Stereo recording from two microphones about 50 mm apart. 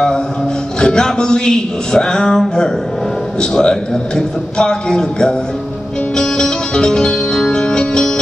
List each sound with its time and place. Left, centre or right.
0.7 s a man's voice: centre
6.1 s music: centre